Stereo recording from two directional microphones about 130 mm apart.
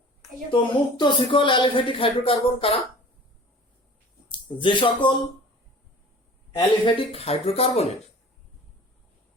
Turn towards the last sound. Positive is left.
turn(degrees=50)  # may be behind; listen again after turning